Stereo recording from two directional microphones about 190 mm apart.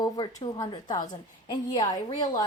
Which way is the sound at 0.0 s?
20° left (ahead or behind).